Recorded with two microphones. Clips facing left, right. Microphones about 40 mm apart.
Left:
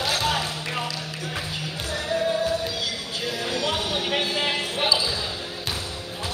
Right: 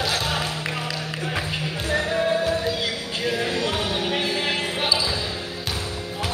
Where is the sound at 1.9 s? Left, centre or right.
Right.